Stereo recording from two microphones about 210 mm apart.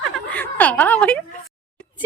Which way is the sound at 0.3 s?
5° left (ahead or behind).